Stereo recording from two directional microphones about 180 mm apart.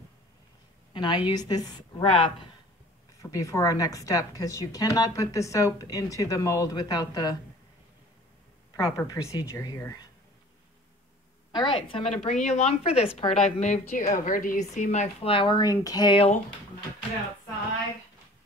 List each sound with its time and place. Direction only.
0.9 s a woman's voice: 25° left (ahead or behind)
3.2 s speech: 15° left (ahead or behind)
8.7 s speech: 20° left (ahead or behind)
11.5 s a woman's voice: 25° left (ahead or behind)